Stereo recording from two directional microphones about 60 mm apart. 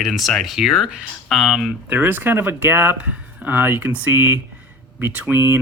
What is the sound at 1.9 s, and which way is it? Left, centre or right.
Speech, right.